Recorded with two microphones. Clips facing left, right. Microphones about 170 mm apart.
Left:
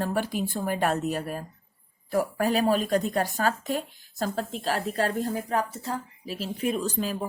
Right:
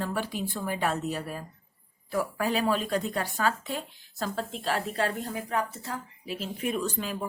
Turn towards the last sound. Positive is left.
turn(degrees=35)  # may be behind; listen again after turning